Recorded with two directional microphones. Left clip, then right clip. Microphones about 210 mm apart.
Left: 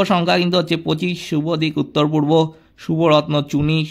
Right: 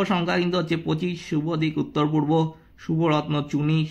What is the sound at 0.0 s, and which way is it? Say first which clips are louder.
Speech: left 7 dB; 40° left (ahead or behind).